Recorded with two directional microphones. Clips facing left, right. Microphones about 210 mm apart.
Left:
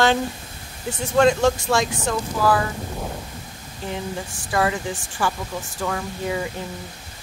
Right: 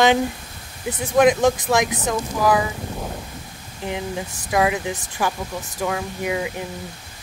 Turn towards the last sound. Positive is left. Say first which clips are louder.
# right 1 dB
turn(degrees=-10)  # may be behind; listen again after turning